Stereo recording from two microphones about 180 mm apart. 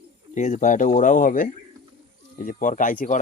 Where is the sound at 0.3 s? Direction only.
40° left (ahead or behind).